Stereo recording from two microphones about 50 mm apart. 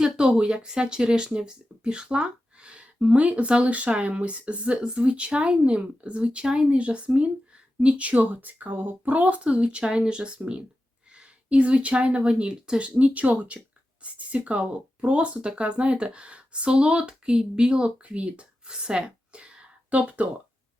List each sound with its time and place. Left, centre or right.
0.0 s speech: centre